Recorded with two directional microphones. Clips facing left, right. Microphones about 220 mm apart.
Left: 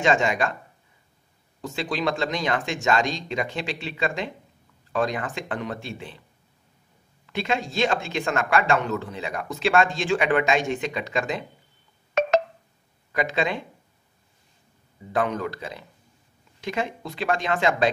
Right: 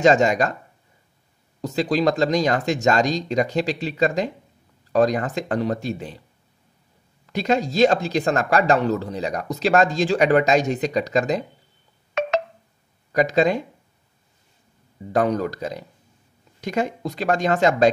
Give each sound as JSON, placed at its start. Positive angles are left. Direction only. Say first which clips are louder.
{"t": 0.0, "sound": "speech", "louder": "right 6 dB", "side_deg": -40}
{"t": 1.6, "sound": "speech", "louder": "right 7 dB", "side_deg": -40}
{"t": 7.2, "sound": "speech", "louder": "right 6 dB", "side_deg": -40}
{"t": 12.1, "sound": "telephone dialing", "louder": "left 2 dB", "side_deg": 40}
{"t": 13.1, "sound": "speech", "louder": "right 7 dB", "side_deg": -40}
{"t": 15.1, "sound": "speech", "louder": "right 5 dB", "side_deg": -40}